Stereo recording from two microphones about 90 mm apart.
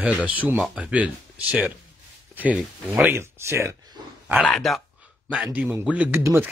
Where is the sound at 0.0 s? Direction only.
15° right (ahead or behind).